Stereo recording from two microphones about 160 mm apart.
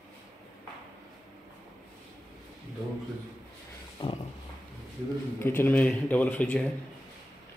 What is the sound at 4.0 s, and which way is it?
Speech, 30° left (ahead or behind).